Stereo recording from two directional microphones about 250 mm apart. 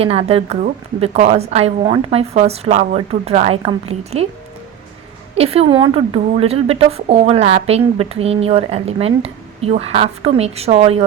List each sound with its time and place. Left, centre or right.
0.0 s a woman's voice: right
5.3 s a woman's voice: right